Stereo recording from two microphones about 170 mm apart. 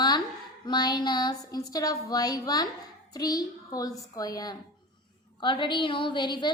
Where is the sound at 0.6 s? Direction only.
25° left (ahead or behind).